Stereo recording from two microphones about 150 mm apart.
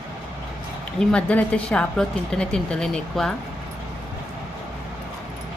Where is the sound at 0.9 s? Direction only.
10° left (ahead or behind).